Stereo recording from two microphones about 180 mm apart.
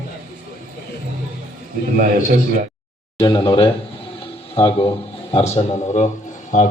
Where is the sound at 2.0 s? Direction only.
55° right (ahead or behind).